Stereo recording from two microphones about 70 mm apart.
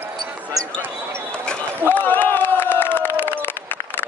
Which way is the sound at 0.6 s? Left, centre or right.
Right.